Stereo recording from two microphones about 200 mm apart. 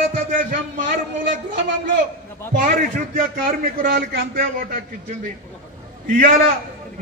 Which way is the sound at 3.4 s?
45° right (ahead or behind).